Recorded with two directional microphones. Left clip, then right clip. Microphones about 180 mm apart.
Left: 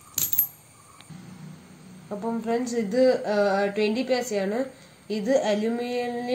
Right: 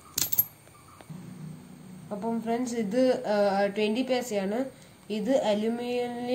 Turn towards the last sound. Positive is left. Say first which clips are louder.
# left 2 dB
turn(degrees=15)  # may be behind; listen again after turning